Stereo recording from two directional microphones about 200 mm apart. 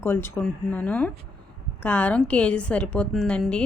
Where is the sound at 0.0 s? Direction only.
10° left (ahead or behind).